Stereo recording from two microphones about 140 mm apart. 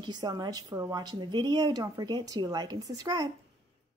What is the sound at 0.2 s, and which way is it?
Speech, 30° right (ahead or behind).